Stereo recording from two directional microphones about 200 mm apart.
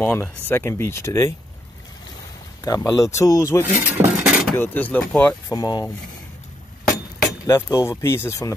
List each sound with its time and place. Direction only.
0.0 s speech: 10° left (ahead or behind)
2.6 s speech: 15° left (ahead or behind)
3.6 s a sound: 5° right (ahead or behind)
4.6 s speech: 10° left (ahead or behind)
5.5 s speech: 20° left (ahead or behind)
7.4 s speech: 15° left (ahead or behind)